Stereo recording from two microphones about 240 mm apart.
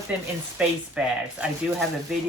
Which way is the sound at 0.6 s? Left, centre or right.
Centre.